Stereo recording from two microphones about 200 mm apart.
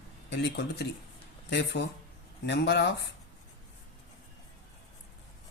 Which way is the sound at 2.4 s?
60° left (ahead or behind).